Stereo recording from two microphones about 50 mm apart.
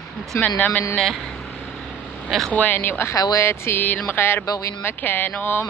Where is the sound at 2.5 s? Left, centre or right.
Left.